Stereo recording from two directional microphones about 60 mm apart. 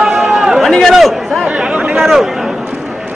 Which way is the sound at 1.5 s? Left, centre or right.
Centre.